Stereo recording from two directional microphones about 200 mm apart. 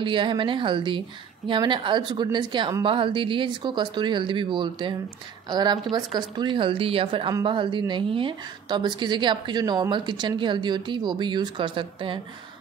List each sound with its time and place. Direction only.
0.0 s a woman's voice: 25° right (ahead or behind)